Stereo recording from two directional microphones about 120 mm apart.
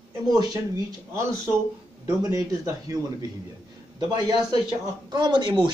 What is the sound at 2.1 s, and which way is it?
A man's voice, 25° right (ahead or behind).